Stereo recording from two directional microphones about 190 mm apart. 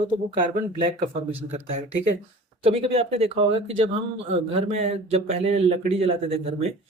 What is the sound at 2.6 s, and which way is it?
Speech, 30° right (ahead or behind).